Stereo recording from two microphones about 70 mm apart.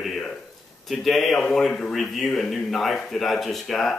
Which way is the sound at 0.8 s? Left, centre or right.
Centre.